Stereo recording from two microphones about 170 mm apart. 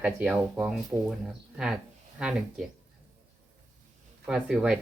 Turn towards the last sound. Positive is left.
turn(degrees=-5)  # may be behind; listen again after turning